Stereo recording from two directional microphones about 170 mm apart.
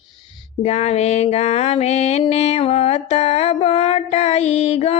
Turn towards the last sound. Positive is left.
turn(degrees=40)  # may be behind; listen again after turning